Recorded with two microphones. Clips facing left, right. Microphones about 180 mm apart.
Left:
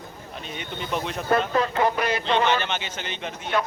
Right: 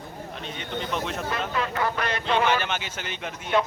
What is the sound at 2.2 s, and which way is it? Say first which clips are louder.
Speech: right 1 dB; 10° right (ahead or behind).